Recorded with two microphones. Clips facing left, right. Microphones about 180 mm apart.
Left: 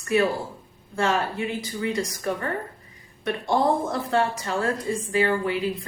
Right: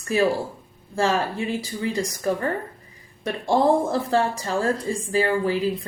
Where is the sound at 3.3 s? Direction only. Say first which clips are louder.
Right 3 dB; 30° right (ahead or behind).